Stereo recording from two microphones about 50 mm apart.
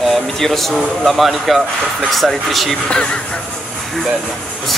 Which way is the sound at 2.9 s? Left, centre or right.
Centre.